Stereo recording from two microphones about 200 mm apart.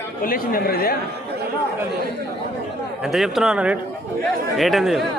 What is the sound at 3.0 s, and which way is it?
A man's voice, centre (ahead or behind).